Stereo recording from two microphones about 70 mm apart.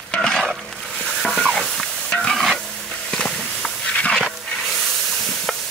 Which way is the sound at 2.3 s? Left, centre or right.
Centre.